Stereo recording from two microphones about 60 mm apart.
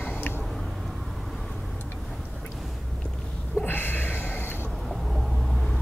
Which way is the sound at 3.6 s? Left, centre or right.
Left.